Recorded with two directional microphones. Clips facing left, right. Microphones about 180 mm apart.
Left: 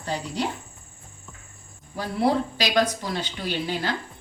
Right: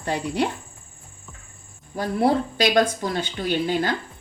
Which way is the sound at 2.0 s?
50° right (ahead or behind).